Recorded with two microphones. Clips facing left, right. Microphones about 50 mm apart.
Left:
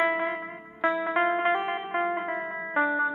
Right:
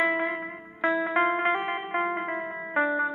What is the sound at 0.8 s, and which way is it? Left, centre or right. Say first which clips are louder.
Music: right 1 dB; centre.